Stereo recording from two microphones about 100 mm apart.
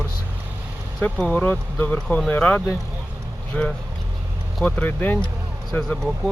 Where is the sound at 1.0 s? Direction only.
15° left (ahead or behind).